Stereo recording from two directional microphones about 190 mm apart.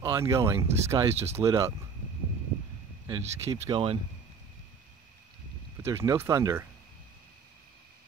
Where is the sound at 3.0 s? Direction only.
20° right (ahead or behind).